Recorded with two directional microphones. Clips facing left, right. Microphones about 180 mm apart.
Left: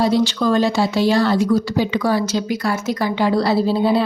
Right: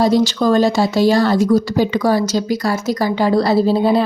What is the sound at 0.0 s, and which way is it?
A woman's voice, 40° right (ahead or behind).